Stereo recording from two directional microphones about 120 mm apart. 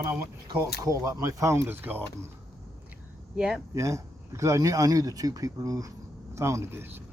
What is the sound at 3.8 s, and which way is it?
Speech, 25° right (ahead or behind).